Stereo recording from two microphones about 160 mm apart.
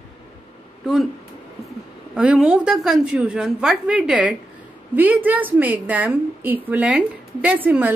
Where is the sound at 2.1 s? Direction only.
10° right (ahead or behind).